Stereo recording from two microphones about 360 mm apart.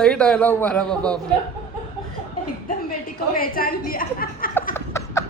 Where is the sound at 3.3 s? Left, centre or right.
Left.